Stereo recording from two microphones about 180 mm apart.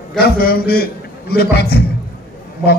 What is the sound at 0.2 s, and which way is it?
A man's voice, 55° left (ahead or behind).